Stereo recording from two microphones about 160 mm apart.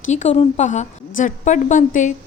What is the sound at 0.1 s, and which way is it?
A woman's voice, 45° left (ahead or behind).